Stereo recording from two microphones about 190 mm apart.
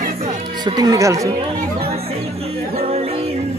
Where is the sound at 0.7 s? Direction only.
20° right (ahead or behind).